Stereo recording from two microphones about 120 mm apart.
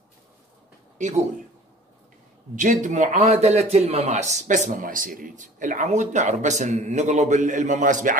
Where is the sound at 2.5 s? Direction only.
90° right.